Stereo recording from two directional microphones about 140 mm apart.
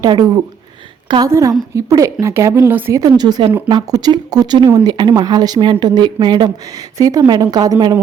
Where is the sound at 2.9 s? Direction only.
30° right (ahead or behind).